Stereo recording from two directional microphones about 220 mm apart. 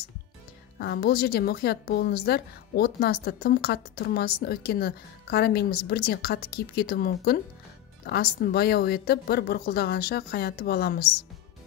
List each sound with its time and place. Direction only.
0.7 s a woman's voice: 45° left (ahead or behind)